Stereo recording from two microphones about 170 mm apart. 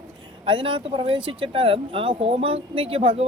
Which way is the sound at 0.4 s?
30° right (ahead or behind).